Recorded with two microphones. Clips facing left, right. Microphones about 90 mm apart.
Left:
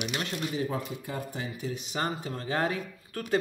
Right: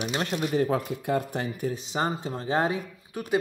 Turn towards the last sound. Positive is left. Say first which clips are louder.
# right 2 dB
turn(degrees=-20)  # may be behind; listen again after turning